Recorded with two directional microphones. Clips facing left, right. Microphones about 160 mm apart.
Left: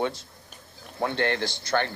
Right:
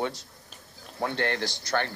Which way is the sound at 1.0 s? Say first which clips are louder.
Left 2 dB; 25° left (ahead or behind).